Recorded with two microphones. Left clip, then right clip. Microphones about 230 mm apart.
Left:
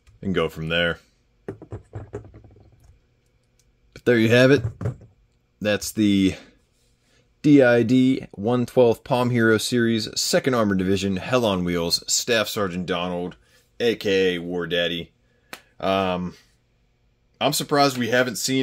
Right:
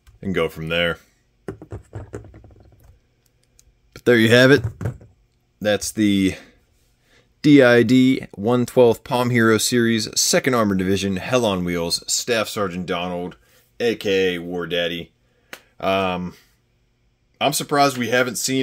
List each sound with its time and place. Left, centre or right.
0.2 s speech: centre
1.4 s a sound: right
3.9 s speech: centre
5.6 s speech: centre
7.2 s speech: centre